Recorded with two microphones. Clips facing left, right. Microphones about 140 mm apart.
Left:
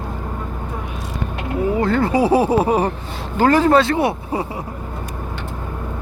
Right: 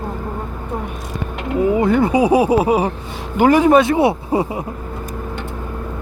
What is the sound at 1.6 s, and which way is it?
Speech, 20° right (ahead or behind).